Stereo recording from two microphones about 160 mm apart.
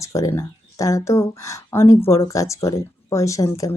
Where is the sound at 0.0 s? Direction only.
20° left (ahead or behind).